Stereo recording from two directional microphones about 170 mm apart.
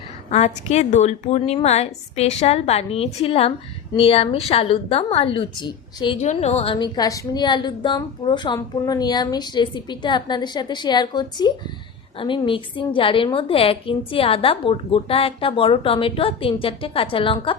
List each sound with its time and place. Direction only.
0.3 s a woman's voice: 40° left (ahead or behind)
6.1 s a woman's voice: 40° left (ahead or behind)
6.7 s a woman's voice: 25° left (ahead or behind)